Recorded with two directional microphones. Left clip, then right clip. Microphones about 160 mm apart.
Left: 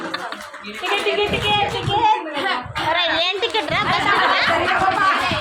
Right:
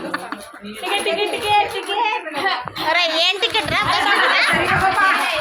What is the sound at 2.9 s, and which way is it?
Speech, centre (ahead or behind).